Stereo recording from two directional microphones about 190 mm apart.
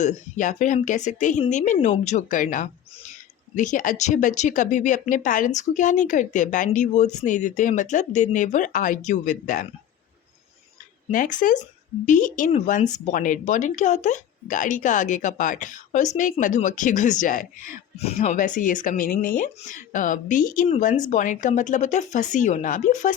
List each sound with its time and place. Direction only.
0.0 s speech: 40° left (ahead or behind)
11.1 s speech: 45° left (ahead or behind)